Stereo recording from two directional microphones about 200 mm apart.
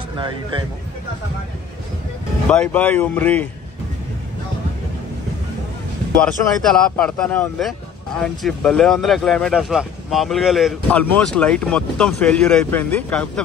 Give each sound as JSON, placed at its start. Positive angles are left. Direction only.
{"t": 0.2, "sound": "speech", "side_deg": -25}
{"t": 2.5, "sound": "speech", "side_deg": 5}
{"t": 6.1, "sound": "speech", "side_deg": 5}